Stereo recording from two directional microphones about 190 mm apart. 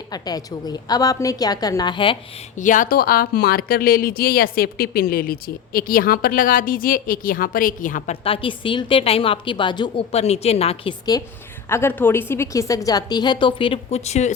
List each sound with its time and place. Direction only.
0.1 s a woman's voice: 20° left (ahead or behind)
2.6 s a woman's voice: 45° left (ahead or behind)
8.1 s a woman's voice: 30° left (ahead or behind)
11.1 s a woman's voice: 20° left (ahead or behind); by 14.3 s 35° left (ahead or behind)